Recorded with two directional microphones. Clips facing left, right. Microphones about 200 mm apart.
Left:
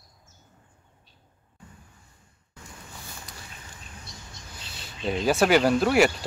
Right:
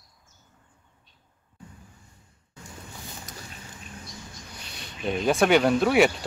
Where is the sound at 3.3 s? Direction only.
45° right (ahead or behind).